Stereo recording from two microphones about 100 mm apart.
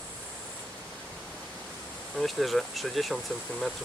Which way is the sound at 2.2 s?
Centre (ahead or behind).